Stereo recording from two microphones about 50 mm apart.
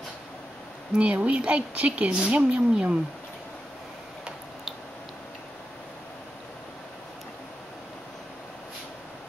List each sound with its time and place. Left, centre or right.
0.9 s speech: right